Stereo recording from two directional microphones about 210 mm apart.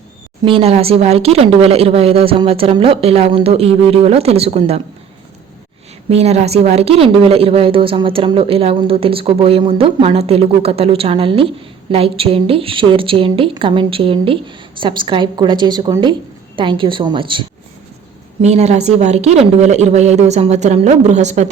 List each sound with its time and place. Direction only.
0.4 s a woman's voice: 25° right (ahead or behind)
6.1 s a woman's voice: 30° right (ahead or behind)
18.4 s speech: 30° right (ahead or behind)